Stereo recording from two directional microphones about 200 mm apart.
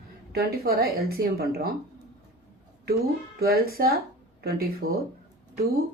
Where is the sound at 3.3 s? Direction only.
50° right (ahead or behind).